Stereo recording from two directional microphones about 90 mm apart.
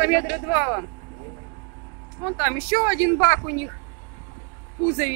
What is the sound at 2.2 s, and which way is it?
Speech, 15° right (ahead or behind).